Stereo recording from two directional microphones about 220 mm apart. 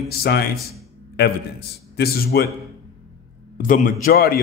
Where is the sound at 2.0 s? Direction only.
45° left (ahead or behind).